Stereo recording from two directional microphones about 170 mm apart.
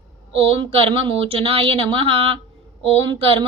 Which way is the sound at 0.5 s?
30° right (ahead or behind).